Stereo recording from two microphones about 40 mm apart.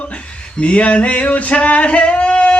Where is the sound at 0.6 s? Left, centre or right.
Left.